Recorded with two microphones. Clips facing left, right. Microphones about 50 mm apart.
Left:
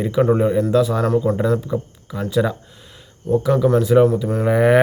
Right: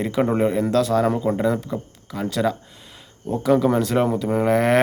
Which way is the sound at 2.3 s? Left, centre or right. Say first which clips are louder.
Left 3 dB; centre.